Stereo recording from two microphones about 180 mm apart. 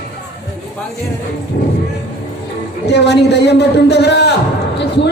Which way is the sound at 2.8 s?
70° left (ahead or behind).